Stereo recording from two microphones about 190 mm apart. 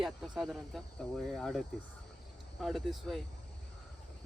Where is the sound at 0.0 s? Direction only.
Centre (ahead or behind).